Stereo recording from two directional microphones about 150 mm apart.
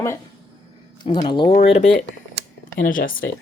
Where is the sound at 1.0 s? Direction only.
30° left (ahead or behind).